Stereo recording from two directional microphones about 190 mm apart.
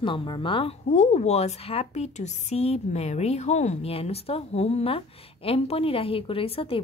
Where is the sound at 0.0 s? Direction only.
25° left (ahead or behind).